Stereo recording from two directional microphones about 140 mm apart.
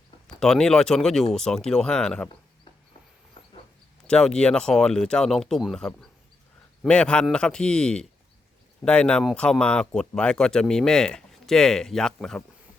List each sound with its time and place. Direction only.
0.3 s speech: 5° left (ahead or behind)
3.4 s a sound: 30° left (ahead or behind)
4.0 s a man's voice: 5° left (ahead or behind)